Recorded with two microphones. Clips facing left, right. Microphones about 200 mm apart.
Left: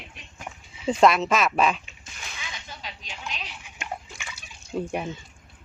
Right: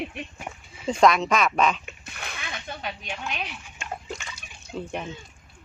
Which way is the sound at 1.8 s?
60° right (ahead or behind).